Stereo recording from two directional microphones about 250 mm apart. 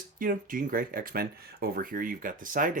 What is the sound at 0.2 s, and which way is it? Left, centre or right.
Speech, right.